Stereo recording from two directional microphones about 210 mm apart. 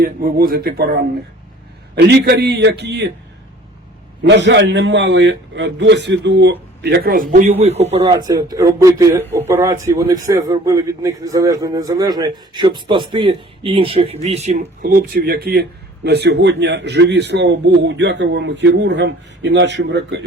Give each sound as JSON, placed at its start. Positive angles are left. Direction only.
{"t": 0.0, "sound": "speech", "side_deg": -45}
{"t": 2.0, "sound": "speech", "side_deg": -50}
{"t": 4.2, "sound": "a man's voice", "side_deg": -55}
{"t": 8.0, "sound": "a man's voice", "side_deg": -15}
{"t": 14.6, "sound": "speech", "side_deg": -45}